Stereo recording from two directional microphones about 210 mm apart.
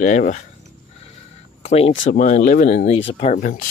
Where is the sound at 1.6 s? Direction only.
30° left (ahead or behind).